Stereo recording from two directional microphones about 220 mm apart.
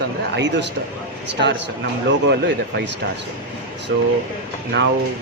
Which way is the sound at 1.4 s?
50° right (ahead or behind).